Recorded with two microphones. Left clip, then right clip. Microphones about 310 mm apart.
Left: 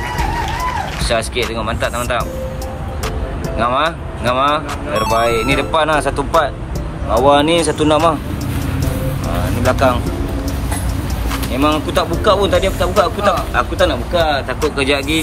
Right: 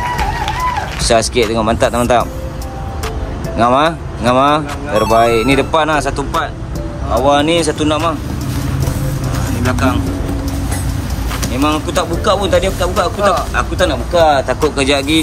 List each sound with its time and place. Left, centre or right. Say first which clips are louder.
1.0 s speech: right 7 dB; centre
3.5 s speech: right 4 dB; centre
5.0 s speech: right 4 dB; centre
5.5 s speech: right 2 dB; centre
9.6 s speech: left 3 dB; centre
11.5 s speech: even; centre